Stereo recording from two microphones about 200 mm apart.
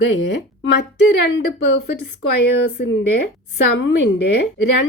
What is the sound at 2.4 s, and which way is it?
A woman's voice, 55° left (ahead or behind).